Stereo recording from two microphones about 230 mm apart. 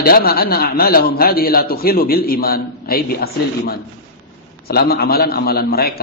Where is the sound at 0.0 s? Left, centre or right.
Left.